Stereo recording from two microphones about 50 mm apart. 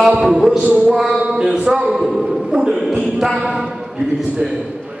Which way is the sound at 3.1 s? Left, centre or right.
Centre.